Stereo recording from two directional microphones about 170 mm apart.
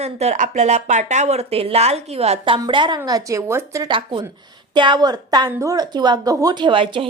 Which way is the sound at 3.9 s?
30° right (ahead or behind).